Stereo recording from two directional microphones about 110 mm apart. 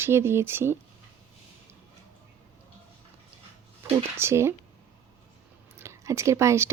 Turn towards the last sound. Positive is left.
turn(degrees=-25)  # may be behind; listen again after turning